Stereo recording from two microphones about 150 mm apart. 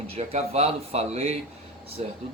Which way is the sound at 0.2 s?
45° right (ahead or behind).